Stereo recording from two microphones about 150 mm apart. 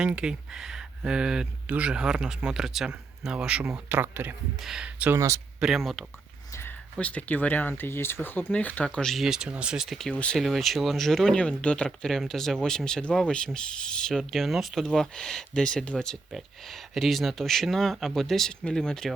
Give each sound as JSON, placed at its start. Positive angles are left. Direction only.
{"t": 0.0, "sound": "speech", "side_deg": -5}
{"t": 5.5, "sound": "speech", "side_deg": 0}
{"t": 6.5, "sound": "a sound", "side_deg": 15}
{"t": 6.9, "sound": "speech", "side_deg": 10}